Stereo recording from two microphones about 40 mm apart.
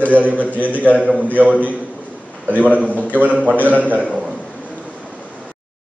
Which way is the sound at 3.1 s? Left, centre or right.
Right.